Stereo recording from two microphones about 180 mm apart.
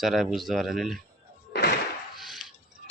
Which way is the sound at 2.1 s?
Centre (ahead or behind).